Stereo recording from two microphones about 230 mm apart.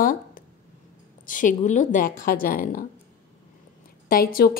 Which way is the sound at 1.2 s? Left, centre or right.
Left.